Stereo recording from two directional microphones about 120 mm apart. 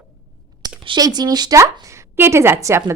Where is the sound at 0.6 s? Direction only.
30° right (ahead or behind).